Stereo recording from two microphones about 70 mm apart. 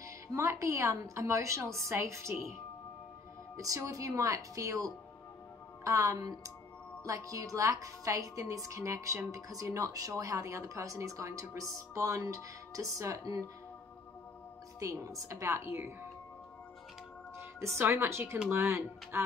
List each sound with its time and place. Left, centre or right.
0.0 s speech: right
3.5 s speech: right
14.8 s speech: right
17.4 s speech: right